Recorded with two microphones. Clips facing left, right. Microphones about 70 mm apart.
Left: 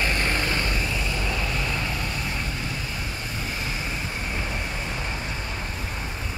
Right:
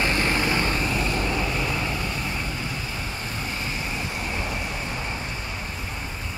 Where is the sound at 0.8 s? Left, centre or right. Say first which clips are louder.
Right 3 dB; right.